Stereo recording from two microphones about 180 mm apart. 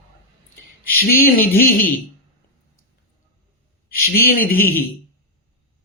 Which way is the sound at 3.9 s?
55° left (ahead or behind).